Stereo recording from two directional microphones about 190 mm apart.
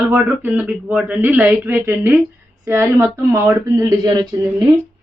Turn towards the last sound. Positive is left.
turn(degrees=-20)  # may be behind; listen again after turning